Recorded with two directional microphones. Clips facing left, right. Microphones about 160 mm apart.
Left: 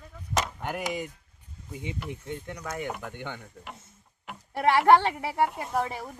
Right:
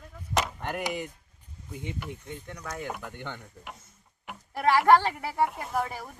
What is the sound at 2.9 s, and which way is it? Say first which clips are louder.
Speech: left 1 dB; 5° left (ahead or behind).